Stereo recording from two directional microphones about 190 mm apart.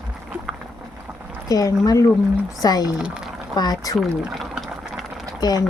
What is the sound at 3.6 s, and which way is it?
Speech, 20° left (ahead or behind).